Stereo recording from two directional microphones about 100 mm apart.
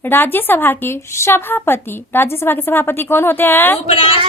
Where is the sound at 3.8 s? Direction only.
75° left (ahead or behind).